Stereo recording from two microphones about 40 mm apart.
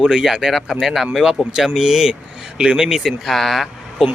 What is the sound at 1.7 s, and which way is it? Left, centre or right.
A man's voice, centre.